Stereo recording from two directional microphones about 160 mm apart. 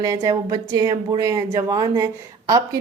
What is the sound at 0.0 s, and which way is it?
A woman's voice, 20° right (ahead or behind).